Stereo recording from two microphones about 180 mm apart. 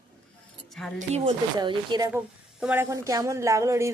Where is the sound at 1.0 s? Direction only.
35° right (ahead or behind).